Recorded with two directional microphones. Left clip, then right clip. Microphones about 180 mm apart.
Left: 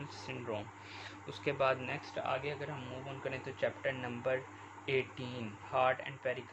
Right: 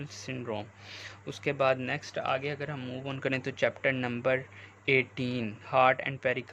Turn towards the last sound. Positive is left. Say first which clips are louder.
# right 8 dB
turn(degrees=-40)  # may be behind; listen again after turning